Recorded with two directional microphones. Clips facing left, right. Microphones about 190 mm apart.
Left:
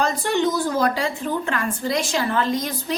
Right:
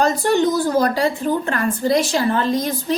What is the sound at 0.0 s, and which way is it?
A woman's voice, 40° right (ahead or behind).